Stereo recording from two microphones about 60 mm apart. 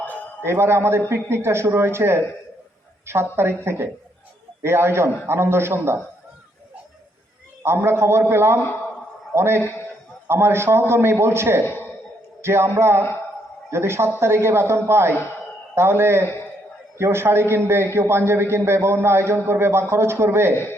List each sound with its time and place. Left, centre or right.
0.0 s a sound: left
0.4 s a man's voice: right
7.6 s a man's voice: right